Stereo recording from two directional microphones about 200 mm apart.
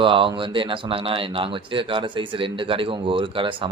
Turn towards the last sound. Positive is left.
turn(degrees=-25)  # may be behind; listen again after turning